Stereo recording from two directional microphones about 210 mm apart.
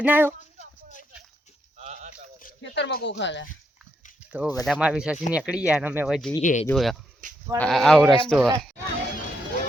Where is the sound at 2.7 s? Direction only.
55° left (ahead or behind).